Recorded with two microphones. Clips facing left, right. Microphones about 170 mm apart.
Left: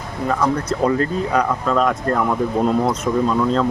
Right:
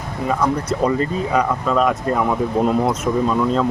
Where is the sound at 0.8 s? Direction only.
Centre (ahead or behind).